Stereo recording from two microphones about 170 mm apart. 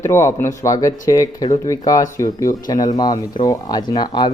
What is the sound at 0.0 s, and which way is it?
Speech, 15° left (ahead or behind).